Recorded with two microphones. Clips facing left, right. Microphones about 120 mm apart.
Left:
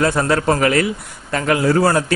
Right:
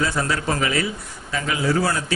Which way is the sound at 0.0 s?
55° left (ahead or behind).